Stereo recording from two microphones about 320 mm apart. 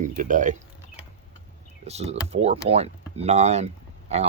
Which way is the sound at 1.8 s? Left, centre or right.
Centre.